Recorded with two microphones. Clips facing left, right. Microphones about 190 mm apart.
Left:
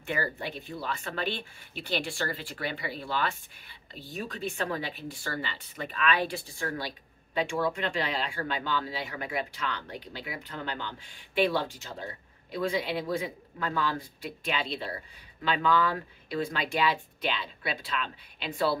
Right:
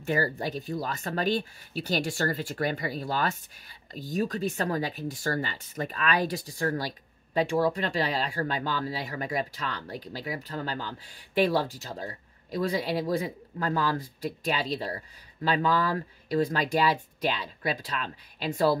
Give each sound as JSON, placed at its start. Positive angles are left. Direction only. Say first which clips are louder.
{"t": 0.0, "sound": "speech", "louder": "right 5 dB", "side_deg": -40}